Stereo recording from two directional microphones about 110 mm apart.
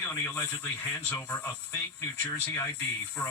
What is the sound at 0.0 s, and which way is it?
Speech, 20° left (ahead or behind).